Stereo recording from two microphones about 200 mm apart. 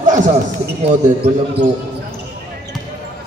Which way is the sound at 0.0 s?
40° right (ahead or behind).